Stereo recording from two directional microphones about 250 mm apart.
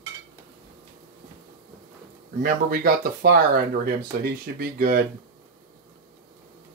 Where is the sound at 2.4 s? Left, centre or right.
Right.